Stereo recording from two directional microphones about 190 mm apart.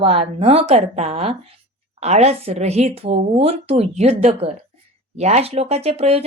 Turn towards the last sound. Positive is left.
turn(degrees=-30)  # may be behind; listen again after turning